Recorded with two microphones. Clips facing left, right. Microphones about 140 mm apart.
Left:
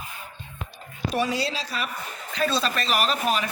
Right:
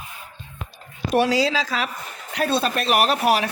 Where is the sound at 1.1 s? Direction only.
80° right.